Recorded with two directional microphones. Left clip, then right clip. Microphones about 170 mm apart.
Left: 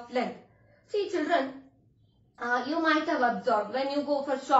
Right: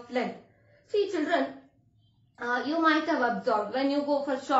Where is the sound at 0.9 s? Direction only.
15° right (ahead or behind).